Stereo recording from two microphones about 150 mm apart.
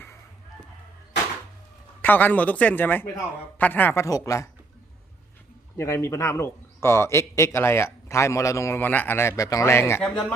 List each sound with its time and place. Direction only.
2.0 s a man's voice: 10° left (ahead or behind)
5.7 s a man's voice: 20° left (ahead or behind)
10.0 s speech: 5° left (ahead or behind)